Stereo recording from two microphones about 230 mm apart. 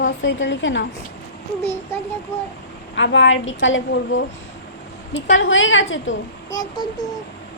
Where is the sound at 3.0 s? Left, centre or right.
Left.